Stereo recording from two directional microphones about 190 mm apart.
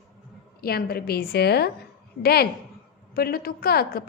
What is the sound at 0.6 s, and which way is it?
A woman's voice, 55° left (ahead or behind).